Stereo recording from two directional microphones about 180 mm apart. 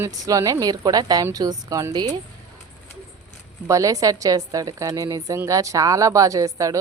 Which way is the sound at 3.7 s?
20° right (ahead or behind).